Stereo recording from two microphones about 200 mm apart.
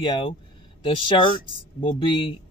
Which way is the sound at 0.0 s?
25° left (ahead or behind).